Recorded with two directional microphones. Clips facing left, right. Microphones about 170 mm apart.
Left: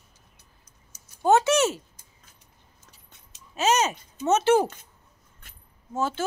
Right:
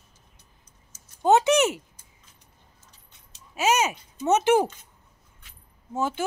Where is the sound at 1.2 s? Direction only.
20° right (ahead or behind).